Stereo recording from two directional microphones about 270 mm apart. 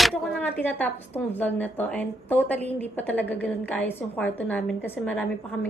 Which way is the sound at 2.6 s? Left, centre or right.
Right.